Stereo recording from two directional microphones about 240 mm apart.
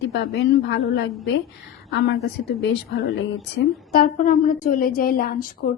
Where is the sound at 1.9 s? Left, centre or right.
Left.